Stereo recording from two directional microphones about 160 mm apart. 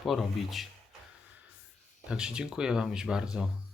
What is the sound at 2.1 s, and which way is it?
Speech, 5° right (ahead or behind).